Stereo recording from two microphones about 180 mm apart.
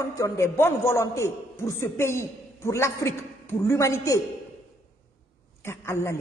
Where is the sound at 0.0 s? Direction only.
15° left (ahead or behind).